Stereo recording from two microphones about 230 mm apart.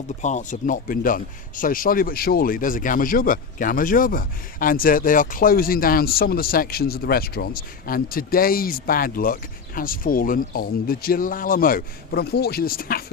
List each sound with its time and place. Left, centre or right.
0.2 s speech: left